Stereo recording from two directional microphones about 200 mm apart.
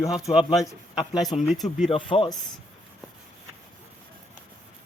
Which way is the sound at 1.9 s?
25° left (ahead or behind).